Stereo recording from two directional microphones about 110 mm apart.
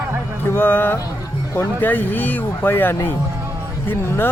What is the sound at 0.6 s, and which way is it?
Speech, 20° left (ahead or behind).